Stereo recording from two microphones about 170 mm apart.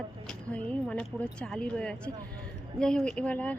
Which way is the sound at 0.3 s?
5° left (ahead or behind).